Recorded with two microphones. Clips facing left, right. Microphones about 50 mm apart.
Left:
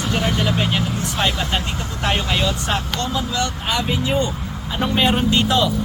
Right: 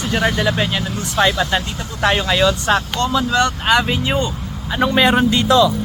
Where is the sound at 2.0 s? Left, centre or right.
Right.